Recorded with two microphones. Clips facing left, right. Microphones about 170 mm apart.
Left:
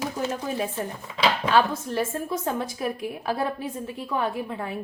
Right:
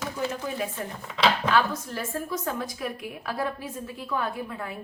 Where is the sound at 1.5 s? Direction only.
25° left (ahead or behind).